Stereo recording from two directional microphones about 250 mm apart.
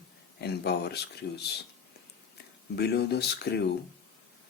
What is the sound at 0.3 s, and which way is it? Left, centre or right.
Speech, left.